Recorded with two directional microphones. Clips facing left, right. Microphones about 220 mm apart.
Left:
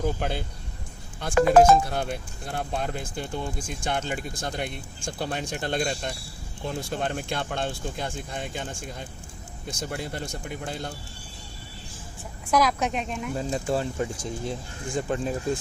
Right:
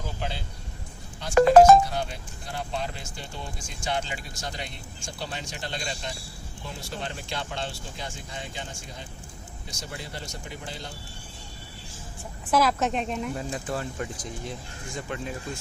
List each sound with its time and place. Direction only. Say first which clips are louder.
0.2 s speech: left 5 dB; 55° left (ahead or behind)
12.5 s a woman's voice: even; centre (ahead or behind)
13.3 s speech: left 5 dB; 30° left (ahead or behind)